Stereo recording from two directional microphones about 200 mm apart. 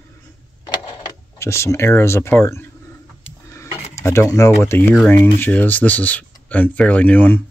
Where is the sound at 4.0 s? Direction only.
15° left (ahead or behind).